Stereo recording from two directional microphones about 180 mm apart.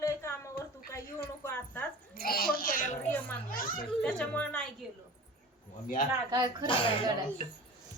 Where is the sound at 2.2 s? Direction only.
55° left (ahead or behind).